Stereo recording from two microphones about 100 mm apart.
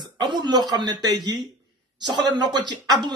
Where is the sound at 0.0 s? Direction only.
45° right (ahead or behind).